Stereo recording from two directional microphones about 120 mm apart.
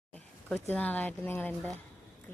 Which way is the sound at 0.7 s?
15° left (ahead or behind).